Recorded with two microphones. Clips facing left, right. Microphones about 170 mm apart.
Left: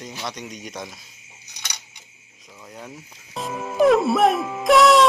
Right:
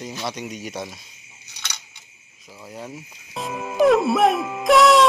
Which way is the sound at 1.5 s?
15° left (ahead or behind).